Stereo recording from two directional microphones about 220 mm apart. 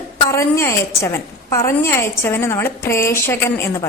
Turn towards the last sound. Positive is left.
turn(degrees=10)  # may be behind; listen again after turning